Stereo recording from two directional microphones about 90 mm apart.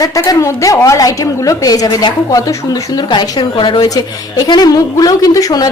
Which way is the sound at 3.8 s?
45° left (ahead or behind).